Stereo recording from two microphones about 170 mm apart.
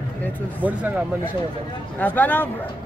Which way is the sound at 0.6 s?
10° right (ahead or behind).